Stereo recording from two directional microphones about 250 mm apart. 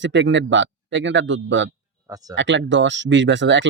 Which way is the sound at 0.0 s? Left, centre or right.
Right.